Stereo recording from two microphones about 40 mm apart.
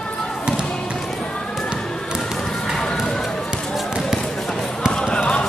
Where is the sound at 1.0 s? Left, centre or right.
Centre.